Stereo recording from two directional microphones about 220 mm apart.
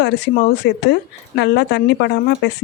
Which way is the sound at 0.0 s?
50° left (ahead or behind).